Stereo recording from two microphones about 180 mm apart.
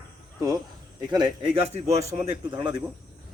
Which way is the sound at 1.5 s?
35° right (ahead or behind).